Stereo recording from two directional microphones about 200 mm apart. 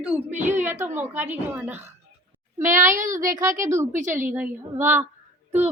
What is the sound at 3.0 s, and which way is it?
A woman's voice, 15° right (ahead or behind).